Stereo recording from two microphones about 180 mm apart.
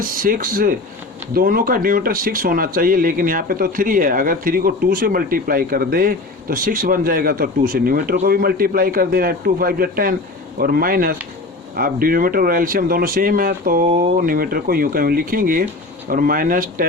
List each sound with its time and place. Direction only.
0.0 s speech: 50° right (ahead or behind)